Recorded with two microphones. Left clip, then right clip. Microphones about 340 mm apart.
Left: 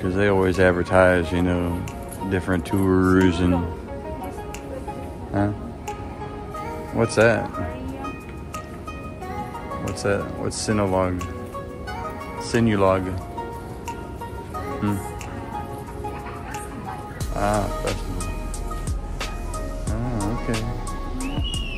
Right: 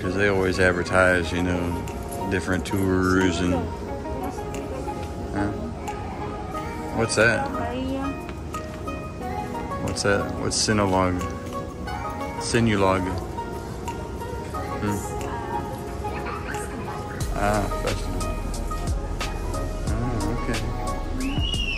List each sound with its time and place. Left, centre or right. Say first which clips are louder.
0.0 s speech: left 2 dB; centre
7.0 s speech: left 2 dB; centre
9.8 s speech: right 1 dB; centre
12.4 s speech: left 2 dB; centre
17.4 s music: left 1 dB; centre